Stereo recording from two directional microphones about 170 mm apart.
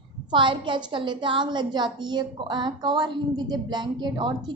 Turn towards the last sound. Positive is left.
turn(degrees=-25)  # may be behind; listen again after turning